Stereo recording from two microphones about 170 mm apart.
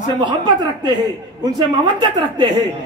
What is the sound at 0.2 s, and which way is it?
A woman's voice, 25° right (ahead or behind).